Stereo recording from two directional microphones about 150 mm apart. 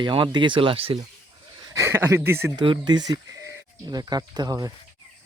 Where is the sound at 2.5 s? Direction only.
30° right (ahead or behind).